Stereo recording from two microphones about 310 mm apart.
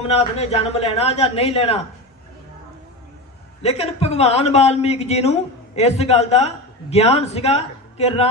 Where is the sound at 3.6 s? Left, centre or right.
Centre.